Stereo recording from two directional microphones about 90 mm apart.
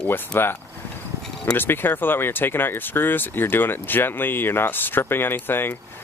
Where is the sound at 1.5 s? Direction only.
25° left (ahead or behind).